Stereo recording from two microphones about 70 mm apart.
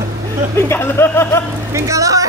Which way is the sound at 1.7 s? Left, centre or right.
Right.